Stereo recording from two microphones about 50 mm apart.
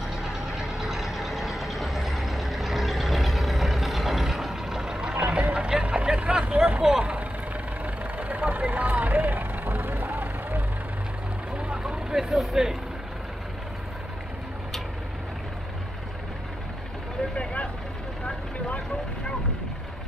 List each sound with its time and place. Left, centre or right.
0.2 s vehicle: centre
5.1 s vehicle: right
7.8 s vehicle: right
11.5 s vehicle: centre
17.4 s vehicle: left